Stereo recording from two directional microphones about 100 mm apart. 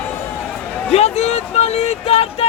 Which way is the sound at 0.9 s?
90° left.